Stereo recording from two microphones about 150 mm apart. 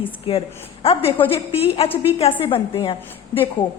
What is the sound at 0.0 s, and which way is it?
A woman's voice, 40° left (ahead or behind).